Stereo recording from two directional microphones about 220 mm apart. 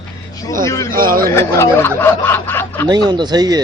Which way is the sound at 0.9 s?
40° right (ahead or behind).